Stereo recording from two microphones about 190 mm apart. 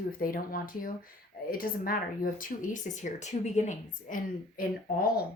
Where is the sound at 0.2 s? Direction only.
50° left (ahead or behind).